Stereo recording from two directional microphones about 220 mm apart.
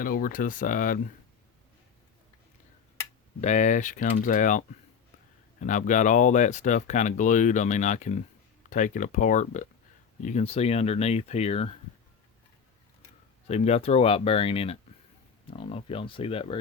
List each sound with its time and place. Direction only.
0.0 s speech: 40° left (ahead or behind)
3.4 s speech: 30° left (ahead or behind)
13.5 s speech: 30° left (ahead or behind)